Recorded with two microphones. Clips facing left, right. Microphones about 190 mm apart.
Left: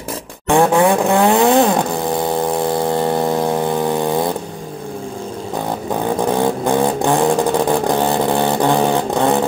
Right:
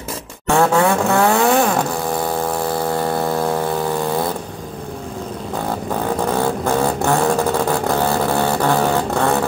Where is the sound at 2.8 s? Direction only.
20° left (ahead or behind).